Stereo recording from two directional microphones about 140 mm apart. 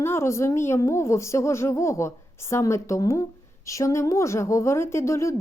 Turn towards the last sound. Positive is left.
turn(degrees=20)  # may be behind; listen again after turning